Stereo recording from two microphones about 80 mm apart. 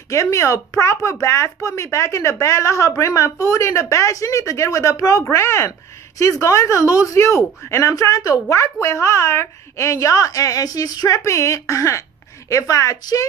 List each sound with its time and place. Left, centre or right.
0.1 s speech: left
8.8 s speech: left